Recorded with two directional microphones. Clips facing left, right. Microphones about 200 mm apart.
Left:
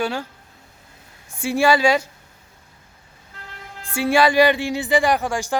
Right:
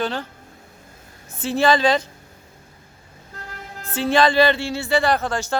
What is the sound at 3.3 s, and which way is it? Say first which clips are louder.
Vehicle: right 4 dB; 45° right (ahead or behind).